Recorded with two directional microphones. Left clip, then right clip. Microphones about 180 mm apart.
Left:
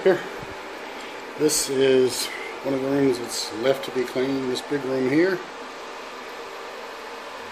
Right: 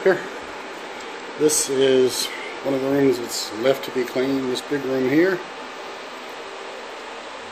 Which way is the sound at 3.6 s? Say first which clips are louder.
Right 2 dB; 5° right (ahead or behind).